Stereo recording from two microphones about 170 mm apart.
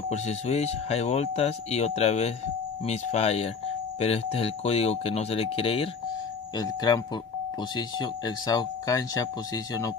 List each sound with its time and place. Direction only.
0.1 s speech: 40° left (ahead or behind)
6.5 s speech: 25° left (ahead or behind)